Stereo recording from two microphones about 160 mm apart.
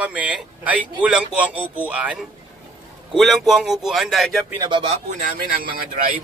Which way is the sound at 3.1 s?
Centre (ahead or behind).